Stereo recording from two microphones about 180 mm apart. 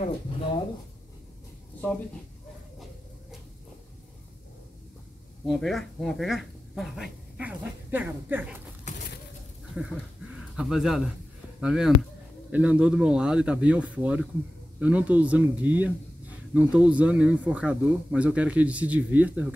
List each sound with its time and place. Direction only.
5.5 s speech: centre (ahead or behind)
8.9 s a sound: 40° left (ahead or behind)
9.8 s speech: 5° right (ahead or behind)